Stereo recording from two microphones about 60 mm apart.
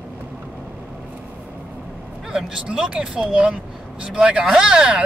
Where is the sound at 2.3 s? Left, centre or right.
Centre.